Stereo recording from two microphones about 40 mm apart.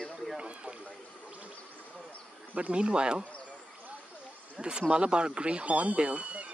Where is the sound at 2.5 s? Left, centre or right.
Right.